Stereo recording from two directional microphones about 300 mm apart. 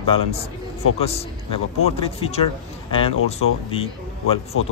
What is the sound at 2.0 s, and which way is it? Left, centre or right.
Speech, centre.